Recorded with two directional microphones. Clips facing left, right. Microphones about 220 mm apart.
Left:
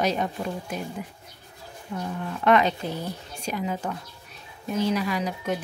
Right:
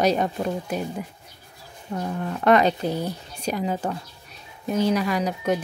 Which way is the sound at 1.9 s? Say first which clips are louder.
Right 3 dB; 40° right (ahead or behind).